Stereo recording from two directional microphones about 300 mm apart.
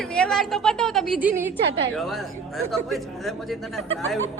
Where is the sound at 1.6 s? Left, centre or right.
Right.